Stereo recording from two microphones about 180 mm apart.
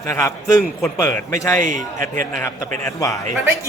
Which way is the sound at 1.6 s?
45° right (ahead or behind).